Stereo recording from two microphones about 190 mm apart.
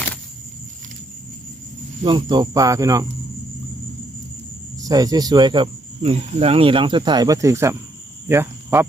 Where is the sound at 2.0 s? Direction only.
25° right (ahead or behind).